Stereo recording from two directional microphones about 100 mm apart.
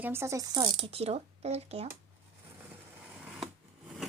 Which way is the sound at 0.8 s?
80° right.